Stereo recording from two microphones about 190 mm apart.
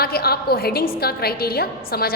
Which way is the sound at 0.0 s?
55° left (ahead or behind).